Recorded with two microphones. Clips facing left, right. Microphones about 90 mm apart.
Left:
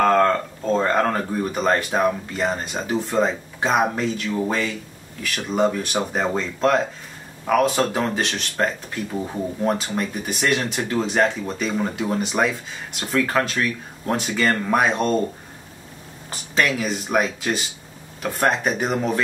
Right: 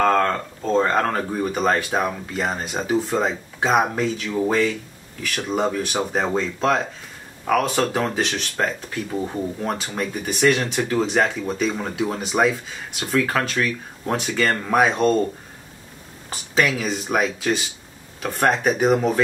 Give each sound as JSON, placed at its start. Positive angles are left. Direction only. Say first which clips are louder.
{"t": 0.0, "sound": "speech", "louder": "left 2 dB", "side_deg": 0}
{"t": 16.3, "sound": "speech", "louder": "right 1 dB", "side_deg": 0}